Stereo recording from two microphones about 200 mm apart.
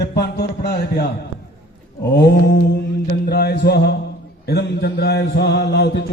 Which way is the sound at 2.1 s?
55° left (ahead or behind).